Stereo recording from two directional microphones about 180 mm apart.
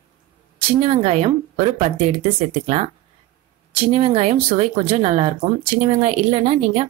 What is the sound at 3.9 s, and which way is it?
Speech, 35° right (ahead or behind).